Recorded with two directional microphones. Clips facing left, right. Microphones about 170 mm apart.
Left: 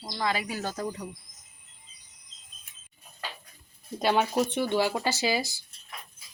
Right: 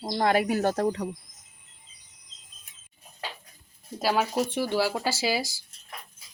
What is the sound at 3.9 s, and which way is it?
Speech, 5° right (ahead or behind).